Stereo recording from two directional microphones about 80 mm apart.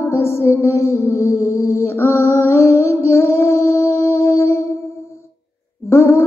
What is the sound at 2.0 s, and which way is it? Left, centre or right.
Music, left.